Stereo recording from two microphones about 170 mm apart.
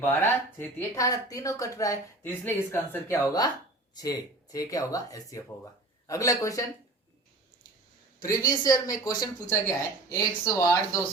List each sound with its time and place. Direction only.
0.0 s speech: 10° left (ahead or behind)
8.2 s speech: 20° left (ahead or behind)